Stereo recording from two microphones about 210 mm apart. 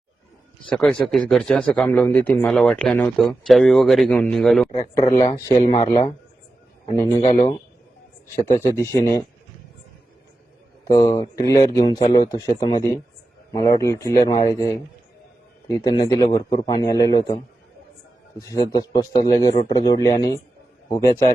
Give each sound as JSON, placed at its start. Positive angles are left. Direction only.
{"t": 0.7, "sound": "speech", "side_deg": 5}
{"t": 5.5, "sound": "a man's voice", "side_deg": 20}
{"t": 7.2, "sound": "speech", "side_deg": 25}
{"t": 8.7, "sound": "a man's voice", "side_deg": 15}
{"t": 10.8, "sound": "a man's voice", "side_deg": 20}
{"t": 18.3, "sound": "a man's voice", "side_deg": 15}